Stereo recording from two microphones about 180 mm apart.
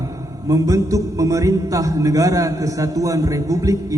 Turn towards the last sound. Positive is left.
turn(degrees=-15)  # may be behind; listen again after turning